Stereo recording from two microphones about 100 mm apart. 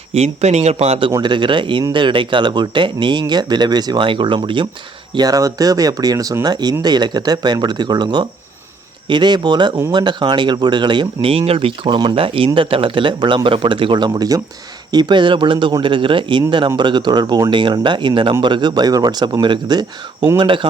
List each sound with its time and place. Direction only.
0.1 s speech: 90° right; by 1.1 s 75° right (ahead or behind)
1.2 s speech: 50° right (ahead or behind)
5.1 s speech: 40° right (ahead or behind)
14.9 s speech: 50° right (ahead or behind)